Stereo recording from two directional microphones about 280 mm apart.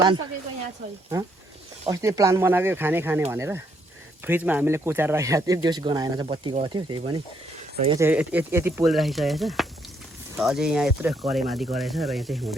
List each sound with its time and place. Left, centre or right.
1.8 s speech: centre